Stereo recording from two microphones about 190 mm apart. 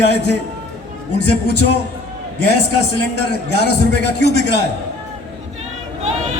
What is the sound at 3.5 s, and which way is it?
A man's voice, 60° left (ahead or behind).